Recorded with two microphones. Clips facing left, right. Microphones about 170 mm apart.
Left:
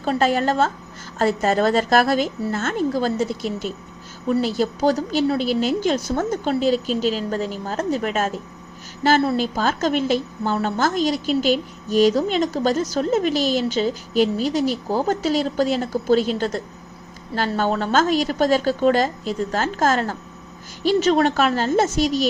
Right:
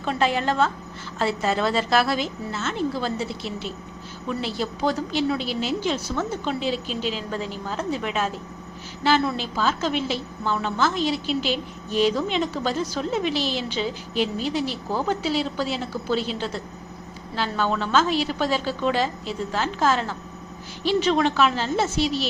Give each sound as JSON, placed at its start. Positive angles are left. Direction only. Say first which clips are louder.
{"t": 0.0, "sound": "a woman's voice", "louder": "left 4 dB", "side_deg": 40}